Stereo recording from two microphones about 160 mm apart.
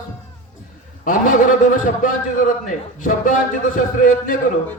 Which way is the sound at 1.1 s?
55° left (ahead or behind).